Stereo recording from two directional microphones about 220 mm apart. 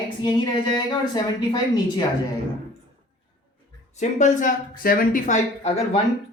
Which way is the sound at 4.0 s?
35° left (ahead or behind).